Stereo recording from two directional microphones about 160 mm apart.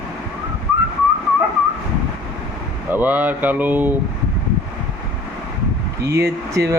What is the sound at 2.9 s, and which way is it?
Speech, 10° right (ahead or behind).